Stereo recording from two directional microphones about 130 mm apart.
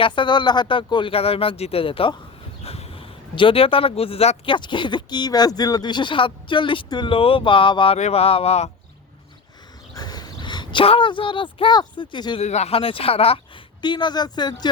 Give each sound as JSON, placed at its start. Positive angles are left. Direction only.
{"t": 0.0, "sound": "speech", "side_deg": 35}
{"t": 4.5, "sound": "speech", "side_deg": 35}
{"t": 7.9, "sound": "speech", "side_deg": 55}
{"t": 9.9, "sound": "speech", "side_deg": 30}
{"t": 12.4, "sound": "speech", "side_deg": 60}
{"t": 13.8, "sound": "speech", "side_deg": 35}